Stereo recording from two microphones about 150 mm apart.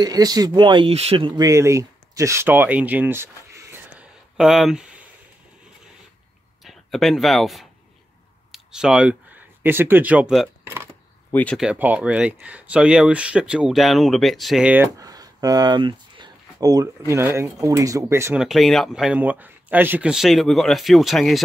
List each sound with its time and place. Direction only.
0.0 s speech: 25° right (ahead or behind)
4.4 s speech: centre (ahead or behind)
6.6 s speech: centre (ahead or behind)
10.6 s a sound: 15° right (ahead or behind)
11.5 s speech: 5° right (ahead or behind)
15.0 s a sound: 25° right (ahead or behind)
17.1 s speech: 15° right (ahead or behind)
18.3 s speech: centre (ahead or behind)